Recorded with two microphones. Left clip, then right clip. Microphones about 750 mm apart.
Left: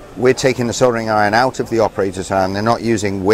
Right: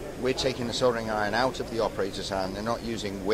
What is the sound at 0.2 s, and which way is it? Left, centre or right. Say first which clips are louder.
Speech: left 14 dB; left.